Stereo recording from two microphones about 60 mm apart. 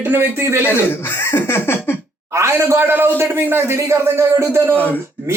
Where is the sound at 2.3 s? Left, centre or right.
Right.